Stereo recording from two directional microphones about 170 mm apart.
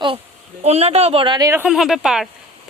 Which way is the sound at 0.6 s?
40° right (ahead or behind).